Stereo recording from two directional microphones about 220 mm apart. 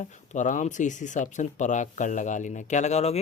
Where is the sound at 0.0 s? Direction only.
35° left (ahead or behind).